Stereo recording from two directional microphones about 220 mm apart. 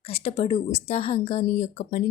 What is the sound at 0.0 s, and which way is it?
A woman's voice, 25° left (ahead or behind).